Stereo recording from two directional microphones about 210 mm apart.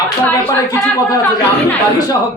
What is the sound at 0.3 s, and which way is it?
Speech, 15° left (ahead or behind).